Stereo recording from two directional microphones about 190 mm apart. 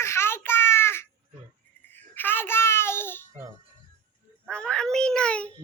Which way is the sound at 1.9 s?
10° left (ahead or behind).